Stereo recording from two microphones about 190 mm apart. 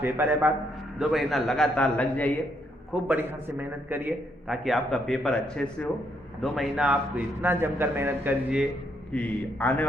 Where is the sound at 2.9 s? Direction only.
10° right (ahead or behind).